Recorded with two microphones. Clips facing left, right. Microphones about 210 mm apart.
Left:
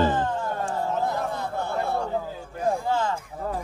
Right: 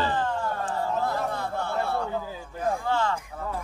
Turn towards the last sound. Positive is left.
turn(degrees=20)  # may be behind; listen again after turning